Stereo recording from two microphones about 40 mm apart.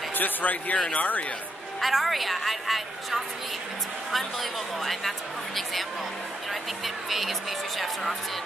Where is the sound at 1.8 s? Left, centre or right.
Centre.